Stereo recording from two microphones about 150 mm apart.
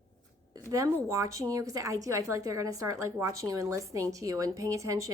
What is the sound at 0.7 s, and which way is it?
Speech, 20° right (ahead or behind).